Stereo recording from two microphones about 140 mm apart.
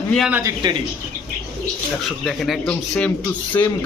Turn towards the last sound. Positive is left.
turn(degrees=15)  # may be behind; listen again after turning